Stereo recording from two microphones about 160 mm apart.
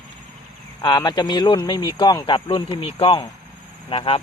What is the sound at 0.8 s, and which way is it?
Speech, 25° left (ahead or behind).